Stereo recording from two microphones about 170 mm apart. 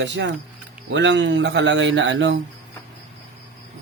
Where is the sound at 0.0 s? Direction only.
90° right.